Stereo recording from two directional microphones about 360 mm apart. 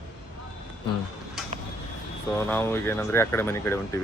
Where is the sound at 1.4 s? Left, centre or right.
Centre.